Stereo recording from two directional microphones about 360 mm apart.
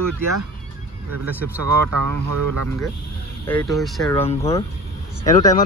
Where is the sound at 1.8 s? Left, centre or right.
Right.